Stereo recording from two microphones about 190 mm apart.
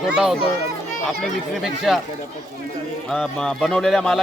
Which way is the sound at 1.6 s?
Centre (ahead or behind).